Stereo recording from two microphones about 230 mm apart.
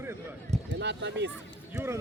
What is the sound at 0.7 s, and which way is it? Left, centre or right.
Speech, right.